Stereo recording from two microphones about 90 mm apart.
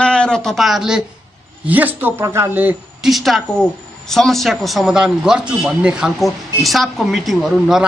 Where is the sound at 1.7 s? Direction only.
20° right (ahead or behind).